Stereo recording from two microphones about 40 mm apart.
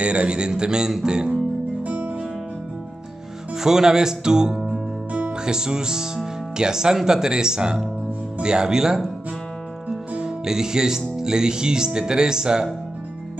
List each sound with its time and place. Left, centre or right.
0.0 s speech: right
1.8 s music: right
3.5 s speech: centre
10.4 s speech: centre